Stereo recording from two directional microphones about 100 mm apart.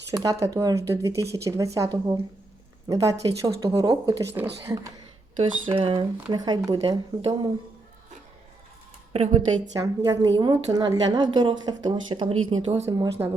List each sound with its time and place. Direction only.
0.2 s speech: 35° right (ahead or behind)
5.4 s speech: 65° right (ahead or behind)
6.3 s speech: 40° right (ahead or behind)
9.7 s speech: 40° right (ahead or behind)
12.2 s speech: 65° right (ahead or behind)
13.2 s speech: 25° right (ahead or behind)